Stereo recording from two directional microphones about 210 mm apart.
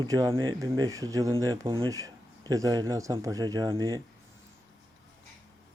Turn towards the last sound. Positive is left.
turn(degrees=-20)  # may be behind; listen again after turning